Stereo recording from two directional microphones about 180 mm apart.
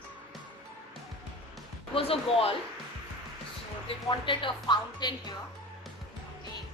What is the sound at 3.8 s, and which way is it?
Speech, 30° left (ahead or behind).